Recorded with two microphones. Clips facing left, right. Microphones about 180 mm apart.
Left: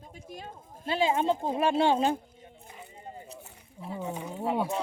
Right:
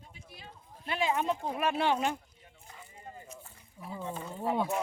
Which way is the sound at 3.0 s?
20° left (ahead or behind).